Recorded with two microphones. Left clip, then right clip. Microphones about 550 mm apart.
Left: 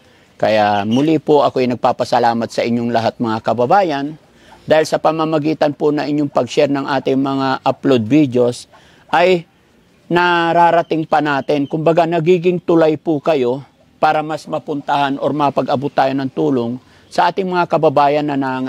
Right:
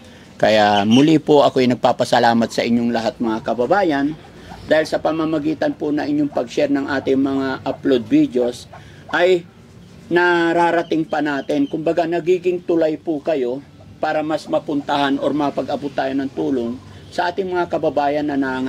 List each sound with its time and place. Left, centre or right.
0.4 s speech: centre; by 4.1 s left
4.6 s speech: left